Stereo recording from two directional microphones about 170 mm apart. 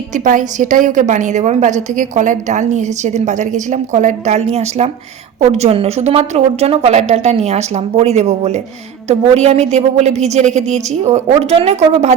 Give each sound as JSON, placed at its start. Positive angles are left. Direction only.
{"t": 0.1, "sound": "a woman's voice", "side_deg": -45}